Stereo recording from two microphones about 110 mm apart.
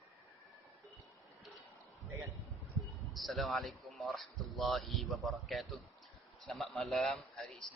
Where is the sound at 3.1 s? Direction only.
Centre (ahead or behind).